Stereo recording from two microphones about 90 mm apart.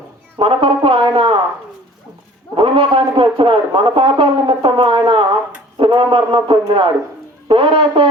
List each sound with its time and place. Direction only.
0.3 s a man's voice: 85° right
2.6 s a man's voice: 90° right
7.4 s speech: 90° right